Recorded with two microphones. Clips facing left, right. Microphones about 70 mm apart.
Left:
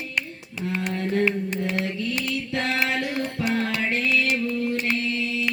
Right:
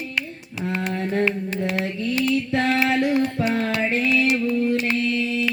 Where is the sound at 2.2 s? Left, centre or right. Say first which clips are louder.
Right 6 dB; right.